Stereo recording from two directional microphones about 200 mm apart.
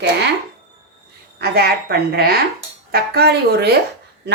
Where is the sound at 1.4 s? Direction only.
50° right (ahead or behind).